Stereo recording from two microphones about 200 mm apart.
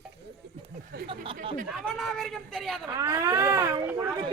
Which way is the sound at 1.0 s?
25° right (ahead or behind).